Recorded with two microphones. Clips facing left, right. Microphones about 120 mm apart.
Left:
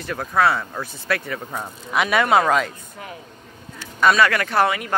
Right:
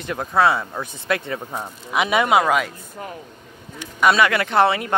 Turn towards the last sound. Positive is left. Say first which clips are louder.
# right 2 dB
turn(degrees=-25)  # may be behind; listen again after turning